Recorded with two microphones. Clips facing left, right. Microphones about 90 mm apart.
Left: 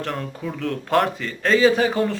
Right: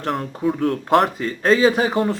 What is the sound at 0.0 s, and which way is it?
Speech, 30° right (ahead or behind).